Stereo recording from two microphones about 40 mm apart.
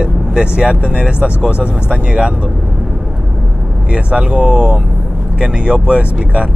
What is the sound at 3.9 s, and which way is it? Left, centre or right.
Speech, right.